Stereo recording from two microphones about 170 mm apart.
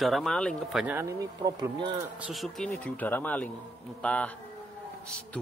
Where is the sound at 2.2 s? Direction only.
Centre (ahead or behind).